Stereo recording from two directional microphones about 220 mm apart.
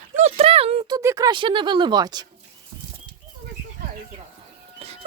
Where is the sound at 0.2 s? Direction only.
30° right (ahead or behind).